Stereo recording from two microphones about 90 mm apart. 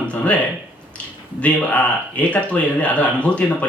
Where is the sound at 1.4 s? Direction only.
15° left (ahead or behind).